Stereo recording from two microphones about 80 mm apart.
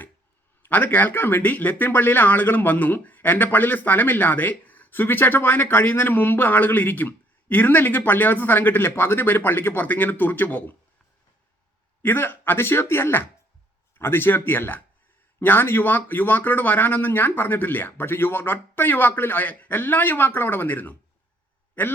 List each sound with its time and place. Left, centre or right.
0.6 s speech: left
12.0 s speech: left